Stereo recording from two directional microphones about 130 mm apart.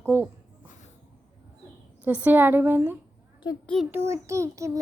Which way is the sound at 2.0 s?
15° right (ahead or behind).